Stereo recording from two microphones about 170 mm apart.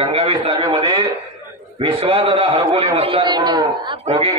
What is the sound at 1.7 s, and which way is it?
A man's voice, 35° right (ahead or behind).